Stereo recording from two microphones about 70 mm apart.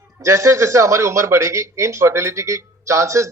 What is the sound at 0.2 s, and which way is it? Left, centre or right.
Speech, right.